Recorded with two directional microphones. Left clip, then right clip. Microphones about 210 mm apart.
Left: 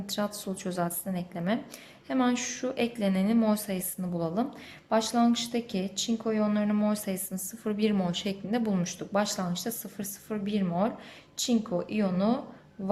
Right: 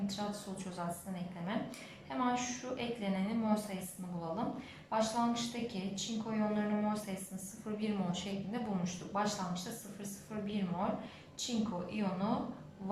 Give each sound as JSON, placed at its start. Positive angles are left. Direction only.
{"t": 0.2, "sound": "a woman's voice", "side_deg": 50}